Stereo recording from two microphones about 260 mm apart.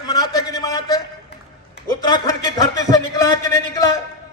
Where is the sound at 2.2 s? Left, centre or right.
Centre.